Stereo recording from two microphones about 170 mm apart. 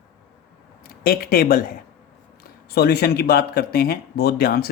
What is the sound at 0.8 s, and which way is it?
Speech, 60° left (ahead or behind).